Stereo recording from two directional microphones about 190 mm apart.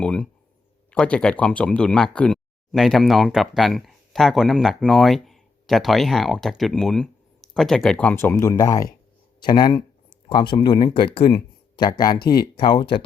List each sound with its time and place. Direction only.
0.0 s speech: 5° left (ahead or behind); by 12.2 s 20° left (ahead or behind)
12.2 s speech: 55° left (ahead or behind)
12.5 s speech: 25° left (ahead or behind)